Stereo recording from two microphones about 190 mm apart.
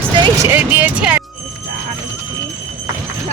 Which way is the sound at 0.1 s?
20° right (ahead or behind).